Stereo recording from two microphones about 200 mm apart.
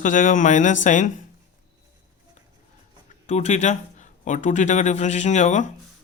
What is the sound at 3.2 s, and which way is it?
Speech, 35° left (ahead or behind).